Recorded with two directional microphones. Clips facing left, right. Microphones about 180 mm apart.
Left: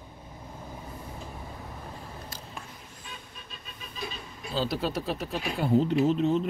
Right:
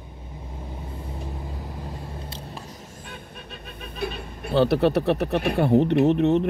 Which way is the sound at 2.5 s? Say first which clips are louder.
Right 5 dB; 40° right (ahead or behind).